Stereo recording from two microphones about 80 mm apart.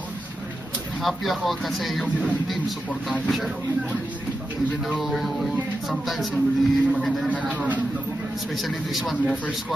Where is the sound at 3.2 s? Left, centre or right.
Centre.